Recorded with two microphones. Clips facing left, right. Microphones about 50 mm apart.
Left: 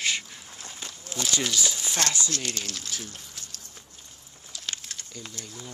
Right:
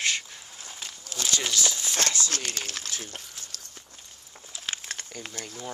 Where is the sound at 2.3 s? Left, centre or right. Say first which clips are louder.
Even; right.